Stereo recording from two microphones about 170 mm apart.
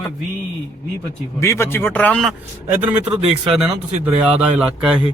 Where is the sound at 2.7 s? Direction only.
10° right (ahead or behind).